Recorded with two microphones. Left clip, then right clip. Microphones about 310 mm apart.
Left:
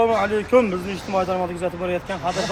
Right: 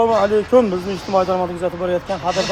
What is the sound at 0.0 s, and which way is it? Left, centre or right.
Speech, centre.